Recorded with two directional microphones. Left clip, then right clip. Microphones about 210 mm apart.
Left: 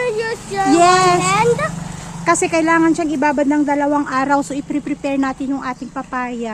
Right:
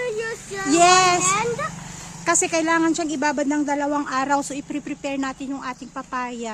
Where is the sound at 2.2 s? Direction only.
15° right (ahead or behind).